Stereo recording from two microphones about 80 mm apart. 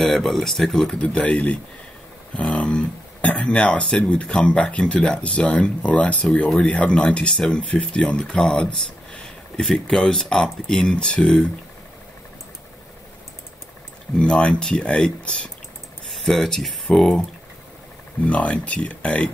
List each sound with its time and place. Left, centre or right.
0.0 s speech: centre
14.1 s speech: centre
18.2 s speech: centre